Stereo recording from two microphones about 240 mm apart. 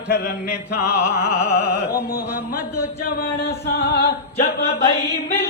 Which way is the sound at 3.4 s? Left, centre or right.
Left.